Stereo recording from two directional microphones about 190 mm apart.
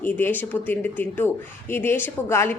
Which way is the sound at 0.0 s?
10° left (ahead or behind).